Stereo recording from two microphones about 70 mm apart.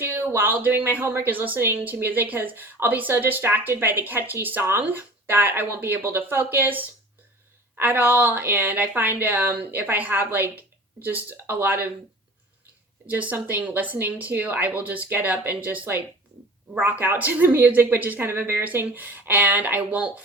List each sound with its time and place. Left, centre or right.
0.3 s speech: right
13.1 s speech: right